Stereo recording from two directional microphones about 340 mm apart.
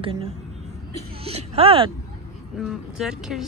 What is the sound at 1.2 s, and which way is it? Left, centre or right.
Music, centre.